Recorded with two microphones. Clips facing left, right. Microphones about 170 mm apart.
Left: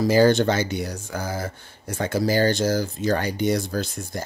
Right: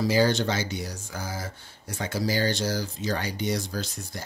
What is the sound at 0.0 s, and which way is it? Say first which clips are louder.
Speech: left 6 dB; 50° left (ahead or behind).